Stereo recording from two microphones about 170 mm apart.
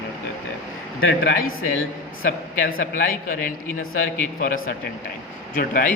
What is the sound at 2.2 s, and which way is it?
Speech, 65° left (ahead or behind).